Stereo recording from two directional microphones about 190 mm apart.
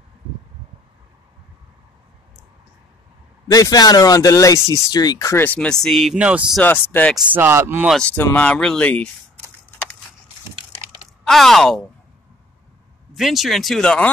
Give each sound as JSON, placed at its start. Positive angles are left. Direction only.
{"t": 3.4, "sound": "speech", "side_deg": 20}
{"t": 6.6, "sound": "speech", "side_deg": 10}
{"t": 7.2, "sound": "speech", "side_deg": -10}
{"t": 7.9, "sound": "speech", "side_deg": 5}
{"t": 11.2, "sound": "speech", "side_deg": 0}
{"t": 13.1, "sound": "speech", "side_deg": 0}